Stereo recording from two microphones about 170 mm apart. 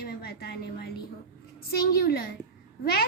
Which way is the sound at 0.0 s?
65° left (ahead or behind).